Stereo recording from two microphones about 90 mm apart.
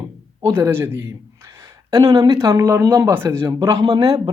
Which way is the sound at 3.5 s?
40° right (ahead or behind).